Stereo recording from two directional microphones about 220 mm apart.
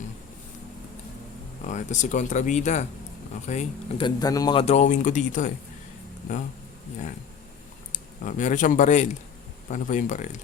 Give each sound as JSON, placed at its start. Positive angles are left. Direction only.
{"t": 1.6, "sound": "speech", "side_deg": 35}
{"t": 8.2, "sound": "speech", "side_deg": 35}